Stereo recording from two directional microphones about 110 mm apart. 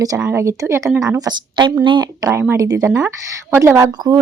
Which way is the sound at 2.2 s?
25° right (ahead or behind).